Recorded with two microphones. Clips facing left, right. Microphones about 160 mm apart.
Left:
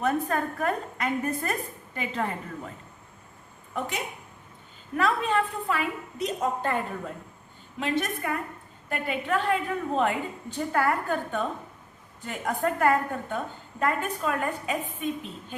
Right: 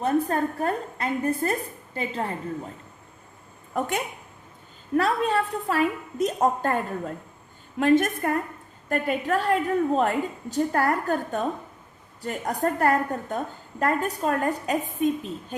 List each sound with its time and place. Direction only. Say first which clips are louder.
0.0 s a woman's voice: right 3 dB; 30° right (ahead or behind)
3.8 s a woman's voice: right 5 dB; 50° right (ahead or behind)
4.9 s a woman's voice: right 2 dB; 35° right (ahead or behind)
7.8 s a woman's voice: right 8 dB; 50° right (ahead or behind)